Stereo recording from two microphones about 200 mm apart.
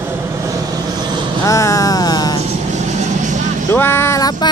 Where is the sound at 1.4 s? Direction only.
15° left (ahead or behind).